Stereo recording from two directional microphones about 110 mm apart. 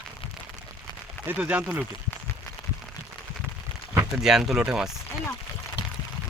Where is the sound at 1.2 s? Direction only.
15° right (ahead or behind).